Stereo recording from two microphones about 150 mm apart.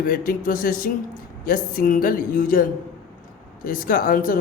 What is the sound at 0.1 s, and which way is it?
Speech, 75° left (ahead or behind).